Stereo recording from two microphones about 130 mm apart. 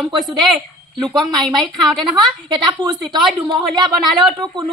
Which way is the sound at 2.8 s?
35° right (ahead or behind).